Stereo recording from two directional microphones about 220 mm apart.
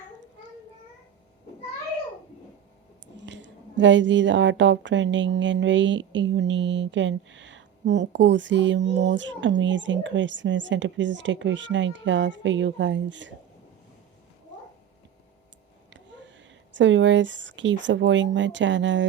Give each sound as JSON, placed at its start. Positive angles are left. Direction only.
{"t": 3.2, "sound": "a woman's voice", "side_deg": -55}
{"t": 16.7, "sound": "a woman's voice", "side_deg": -55}